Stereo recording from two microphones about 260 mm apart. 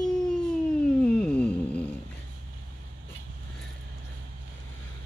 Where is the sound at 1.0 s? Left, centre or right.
Centre.